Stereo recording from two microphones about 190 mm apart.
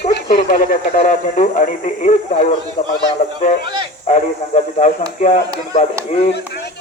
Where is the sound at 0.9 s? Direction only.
45° left (ahead or behind).